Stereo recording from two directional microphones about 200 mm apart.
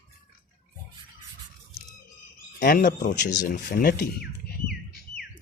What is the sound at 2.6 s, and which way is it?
Speech, 45° left (ahead or behind).